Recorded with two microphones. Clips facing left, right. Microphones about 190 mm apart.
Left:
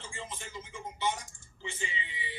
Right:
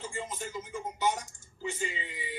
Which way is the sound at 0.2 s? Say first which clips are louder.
Right 4 dB; 35° right (ahead or behind).